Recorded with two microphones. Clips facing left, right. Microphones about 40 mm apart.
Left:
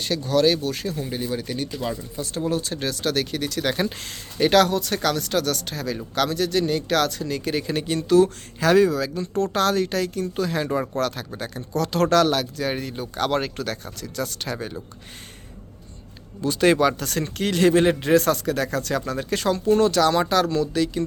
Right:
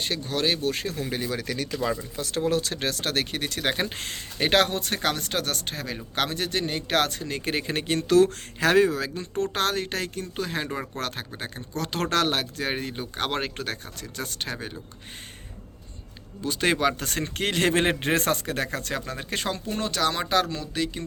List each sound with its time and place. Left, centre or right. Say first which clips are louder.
0.0 s speech: left 7 dB; right
1.0 s speech: left 1 dB; right
2.1 s speech: left 1 dB; right
8.7 s speech: left 4 dB; right
16.4 s speech: left 5 dB; centre
17.0 s speech: left 3 dB; right